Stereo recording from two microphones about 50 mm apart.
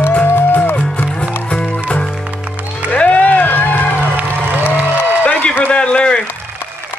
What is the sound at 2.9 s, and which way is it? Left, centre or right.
Run, left.